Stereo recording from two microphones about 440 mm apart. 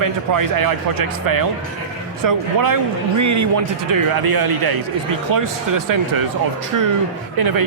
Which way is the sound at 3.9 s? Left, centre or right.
Right.